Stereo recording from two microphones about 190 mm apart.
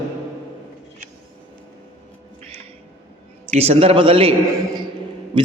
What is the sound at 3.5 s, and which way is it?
Speech, 35° right (ahead or behind).